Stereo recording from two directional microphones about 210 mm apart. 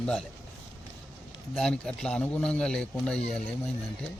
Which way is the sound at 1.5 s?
5° left (ahead or behind).